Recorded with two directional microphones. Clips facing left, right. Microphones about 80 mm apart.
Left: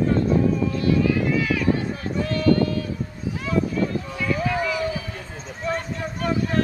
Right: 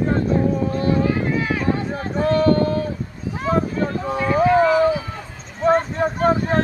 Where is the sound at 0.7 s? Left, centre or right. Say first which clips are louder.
Right 1 dB; right.